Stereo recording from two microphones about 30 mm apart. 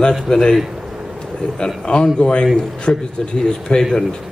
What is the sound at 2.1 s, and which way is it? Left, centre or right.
A man's voice, left.